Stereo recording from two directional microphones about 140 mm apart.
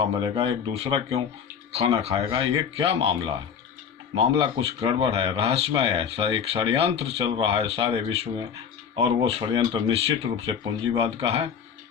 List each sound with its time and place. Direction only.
0.0 s speech: 40° right (ahead or behind)